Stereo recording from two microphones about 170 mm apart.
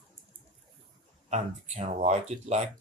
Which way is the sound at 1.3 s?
40° right (ahead or behind).